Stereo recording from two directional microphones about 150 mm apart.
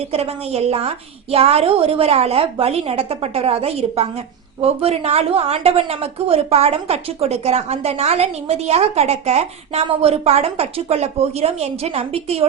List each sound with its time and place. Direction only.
0.1 s a woman's voice: 40° right (ahead or behind)